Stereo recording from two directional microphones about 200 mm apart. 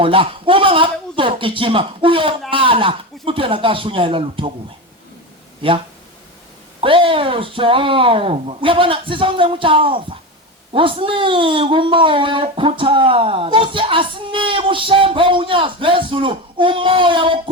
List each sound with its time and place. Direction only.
0.0 s a man's voice: 25° right (ahead or behind)
6.8 s speech: 25° right (ahead or behind)